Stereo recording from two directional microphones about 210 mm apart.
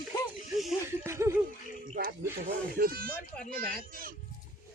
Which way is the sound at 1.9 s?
45° right (ahead or behind).